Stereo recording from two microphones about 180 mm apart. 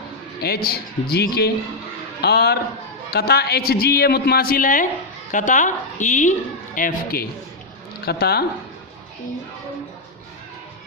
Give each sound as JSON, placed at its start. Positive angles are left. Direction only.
{"t": 0.4, "sound": "a man's voice", "side_deg": 60}